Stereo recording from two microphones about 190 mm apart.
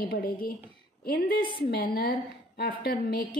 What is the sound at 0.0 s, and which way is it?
A woman's voice, 50° left (ahead or behind).